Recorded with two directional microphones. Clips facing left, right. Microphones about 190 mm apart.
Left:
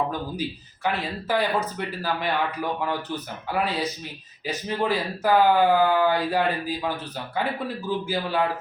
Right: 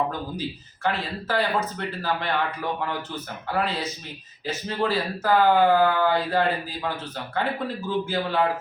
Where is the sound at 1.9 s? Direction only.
10° left (ahead or behind).